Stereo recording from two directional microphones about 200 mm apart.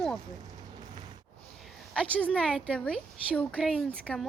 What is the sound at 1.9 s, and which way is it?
A woman's voice, 5° left (ahead or behind).